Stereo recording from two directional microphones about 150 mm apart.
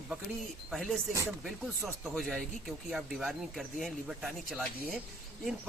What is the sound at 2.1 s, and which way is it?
Speech, centre (ahead or behind).